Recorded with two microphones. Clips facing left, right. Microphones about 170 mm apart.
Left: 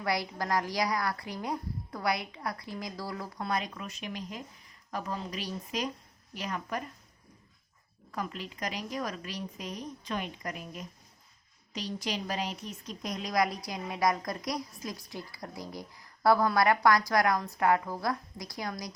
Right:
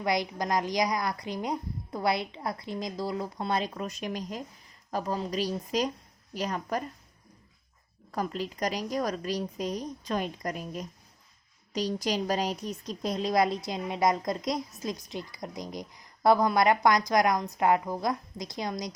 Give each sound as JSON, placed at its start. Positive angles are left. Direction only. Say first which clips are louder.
{"t": 0.0, "sound": "a woman's voice", "louder": "right 3 dB", "side_deg": -20}
{"t": 8.1, "sound": "a woman's voice", "louder": "right 5 dB", "side_deg": -35}